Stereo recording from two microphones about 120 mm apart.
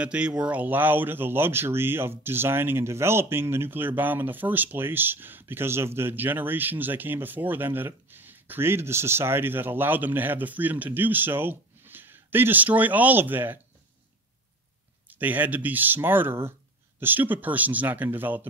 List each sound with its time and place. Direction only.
0.0 s speech: 10° right (ahead or behind)
15.0 s speech: 15° right (ahead or behind)